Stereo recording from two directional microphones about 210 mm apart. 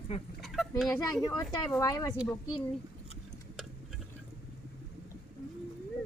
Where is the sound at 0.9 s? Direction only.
15° left (ahead or behind).